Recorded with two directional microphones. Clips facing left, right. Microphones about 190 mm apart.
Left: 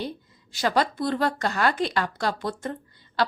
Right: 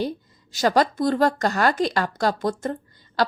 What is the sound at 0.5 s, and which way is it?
A woman's voice, 45° right (ahead or behind).